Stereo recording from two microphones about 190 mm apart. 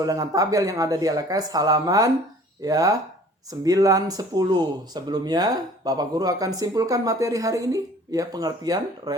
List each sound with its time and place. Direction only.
0.0 s speech: 20° right (ahead or behind)